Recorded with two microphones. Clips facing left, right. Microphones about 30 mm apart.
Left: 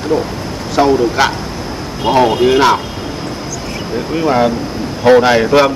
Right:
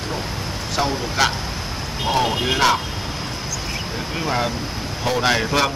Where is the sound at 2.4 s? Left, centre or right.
Centre.